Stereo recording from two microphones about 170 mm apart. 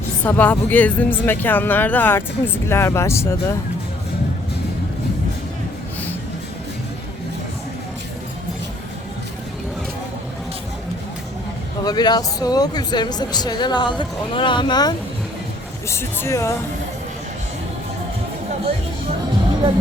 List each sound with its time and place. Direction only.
0.3 s speech: 10° left (ahead or behind)
11.9 s speech: 25° left (ahead or behind)